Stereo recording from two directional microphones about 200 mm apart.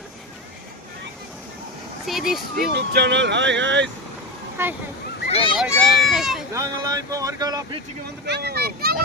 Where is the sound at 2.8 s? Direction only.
55° right (ahead or behind).